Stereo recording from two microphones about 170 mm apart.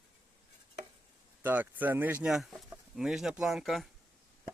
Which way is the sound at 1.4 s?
10° right (ahead or behind).